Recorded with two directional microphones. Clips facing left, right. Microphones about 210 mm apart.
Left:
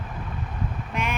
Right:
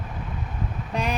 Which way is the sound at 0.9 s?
35° right (ahead or behind).